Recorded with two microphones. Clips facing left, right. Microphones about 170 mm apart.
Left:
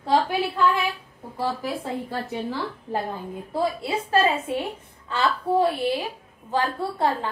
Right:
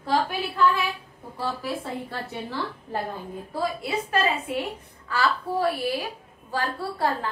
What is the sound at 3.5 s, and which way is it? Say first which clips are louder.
A woman's voice: left 2 dB; 25° left (ahead or behind).